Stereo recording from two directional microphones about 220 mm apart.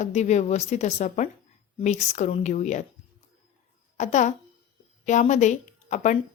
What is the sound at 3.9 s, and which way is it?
A woman's voice, 30° left (ahead or behind).